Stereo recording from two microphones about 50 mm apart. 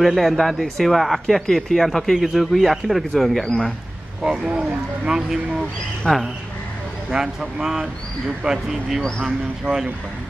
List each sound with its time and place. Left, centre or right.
0.0 s speech: centre
4.2 s speech: centre
7.1 s speech: centre